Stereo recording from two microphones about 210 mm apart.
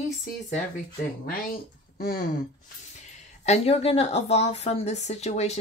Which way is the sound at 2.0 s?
45° left (ahead or behind).